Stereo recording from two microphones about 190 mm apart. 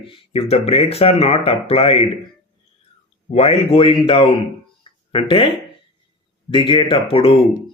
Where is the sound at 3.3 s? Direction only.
30° left (ahead or behind).